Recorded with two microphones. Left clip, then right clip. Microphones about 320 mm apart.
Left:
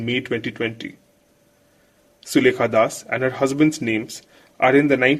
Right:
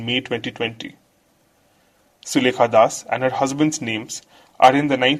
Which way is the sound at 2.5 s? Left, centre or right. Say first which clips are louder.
Right 4 dB; right.